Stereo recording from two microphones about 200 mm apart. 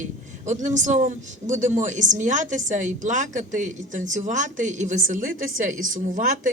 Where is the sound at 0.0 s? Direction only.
35° right (ahead or behind).